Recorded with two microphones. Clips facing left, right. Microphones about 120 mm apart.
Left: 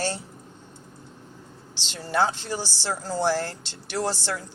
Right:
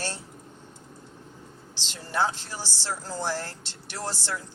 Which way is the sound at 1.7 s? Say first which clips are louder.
Left 4 dB; 75° left (ahead or behind).